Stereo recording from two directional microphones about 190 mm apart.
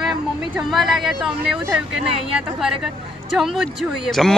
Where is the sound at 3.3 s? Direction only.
Centre (ahead or behind).